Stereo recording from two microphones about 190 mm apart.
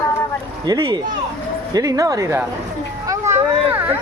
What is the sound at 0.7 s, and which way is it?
Speech, 25° right (ahead or behind).